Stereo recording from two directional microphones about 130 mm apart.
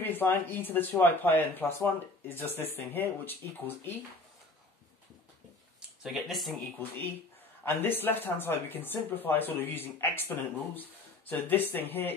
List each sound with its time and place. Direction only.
0.0 s speech: 15° left (ahead or behind)
6.0 s speech: centre (ahead or behind)
7.6 s speech: 15° left (ahead or behind)